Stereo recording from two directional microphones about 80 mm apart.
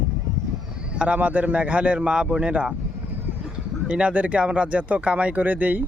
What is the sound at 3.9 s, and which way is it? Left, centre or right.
Speech, centre.